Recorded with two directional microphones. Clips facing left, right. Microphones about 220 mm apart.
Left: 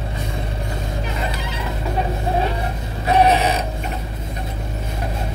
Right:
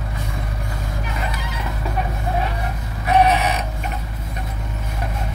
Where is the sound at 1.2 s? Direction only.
30° left (ahead or behind).